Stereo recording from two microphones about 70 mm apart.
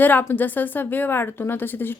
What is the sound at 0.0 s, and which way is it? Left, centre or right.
Speech, left.